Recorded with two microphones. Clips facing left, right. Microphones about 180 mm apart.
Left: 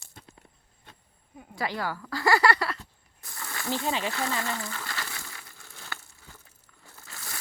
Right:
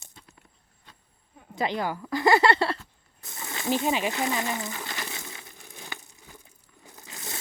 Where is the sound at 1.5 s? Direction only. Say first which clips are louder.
Right 3 dB; 20° right (ahead or behind).